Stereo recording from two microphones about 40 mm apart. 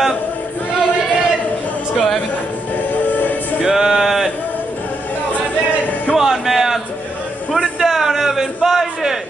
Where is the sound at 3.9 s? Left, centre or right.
Centre.